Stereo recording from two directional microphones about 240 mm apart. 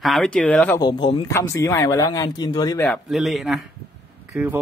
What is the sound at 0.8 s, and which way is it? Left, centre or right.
A man's voice, centre.